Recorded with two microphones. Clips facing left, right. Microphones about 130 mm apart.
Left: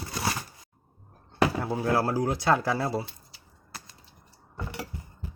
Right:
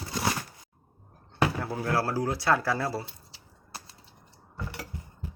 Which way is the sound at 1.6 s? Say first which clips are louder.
Left 3 dB; 15° left (ahead or behind).